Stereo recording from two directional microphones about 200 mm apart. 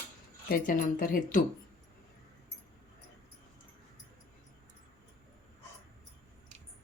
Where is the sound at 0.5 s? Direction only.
40° left (ahead or behind).